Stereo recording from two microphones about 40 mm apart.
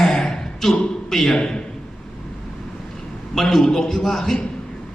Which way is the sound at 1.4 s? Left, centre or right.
Left.